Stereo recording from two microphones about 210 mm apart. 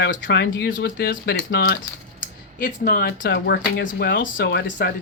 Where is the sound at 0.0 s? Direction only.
55° left (ahead or behind).